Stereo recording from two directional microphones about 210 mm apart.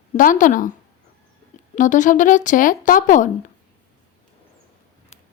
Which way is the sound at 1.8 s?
35° left (ahead or behind).